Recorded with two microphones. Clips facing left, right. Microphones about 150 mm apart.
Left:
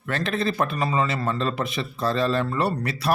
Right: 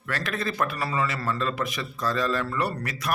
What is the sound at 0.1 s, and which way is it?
A man's voice, 25° left (ahead or behind).